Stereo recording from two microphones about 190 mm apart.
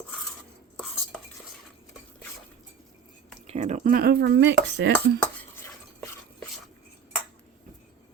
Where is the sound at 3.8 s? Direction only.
50° right (ahead or behind).